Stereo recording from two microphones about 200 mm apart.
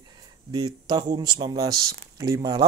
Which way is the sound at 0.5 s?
20° right (ahead or behind).